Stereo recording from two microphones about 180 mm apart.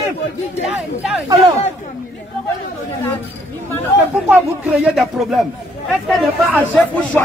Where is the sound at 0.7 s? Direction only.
Centre (ahead or behind).